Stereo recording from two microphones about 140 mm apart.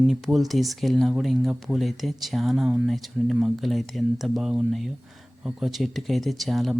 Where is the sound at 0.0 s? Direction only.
Centre (ahead or behind).